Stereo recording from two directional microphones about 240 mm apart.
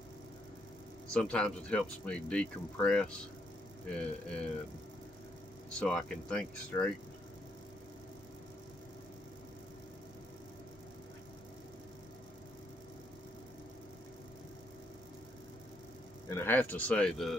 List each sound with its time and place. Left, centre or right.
1.1 s speech: centre
5.7 s speech: centre
16.3 s speech: centre